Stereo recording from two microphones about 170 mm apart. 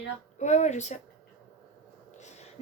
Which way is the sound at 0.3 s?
45° left (ahead or behind).